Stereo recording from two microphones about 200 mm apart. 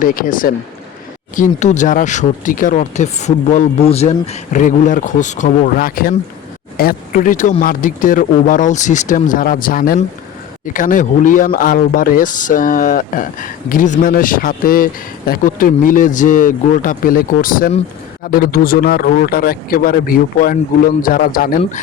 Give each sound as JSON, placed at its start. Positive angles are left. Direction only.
{"t": 0.0, "sound": "speech", "side_deg": 45}